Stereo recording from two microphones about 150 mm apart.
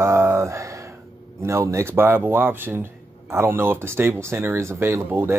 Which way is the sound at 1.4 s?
20° right (ahead or behind).